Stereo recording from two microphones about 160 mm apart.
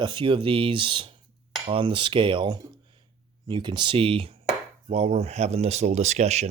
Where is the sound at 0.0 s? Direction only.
30° right (ahead or behind).